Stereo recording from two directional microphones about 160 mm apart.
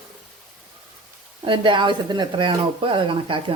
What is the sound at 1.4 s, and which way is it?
Speech, 30° right (ahead or behind).